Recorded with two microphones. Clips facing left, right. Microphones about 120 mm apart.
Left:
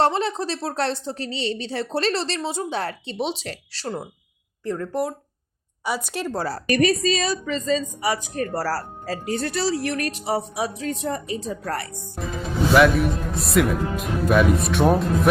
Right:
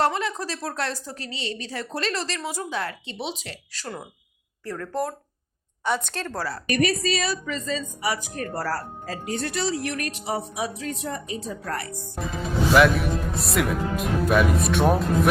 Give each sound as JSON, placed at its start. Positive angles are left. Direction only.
{"t": 0.0, "sound": "a woman's voice", "side_deg": 30}
{"t": 4.6, "sound": "a woman's voice", "side_deg": 20}
{"t": 6.4, "sound": "a woman's voice", "side_deg": 30}
{"t": 12.2, "sound": "speech", "side_deg": 0}